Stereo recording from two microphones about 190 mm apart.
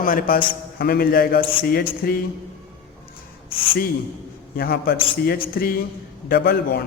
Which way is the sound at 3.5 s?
30° left (ahead or behind).